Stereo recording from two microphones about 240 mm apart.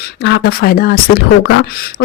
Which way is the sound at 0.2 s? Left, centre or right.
Left.